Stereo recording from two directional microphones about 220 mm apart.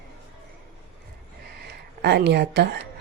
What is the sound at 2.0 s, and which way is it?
Speech, 50° right (ahead or behind).